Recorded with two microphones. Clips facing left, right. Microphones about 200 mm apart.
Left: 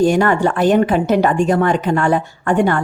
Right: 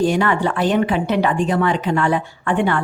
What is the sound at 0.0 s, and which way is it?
A woman's voice, 45° left (ahead or behind).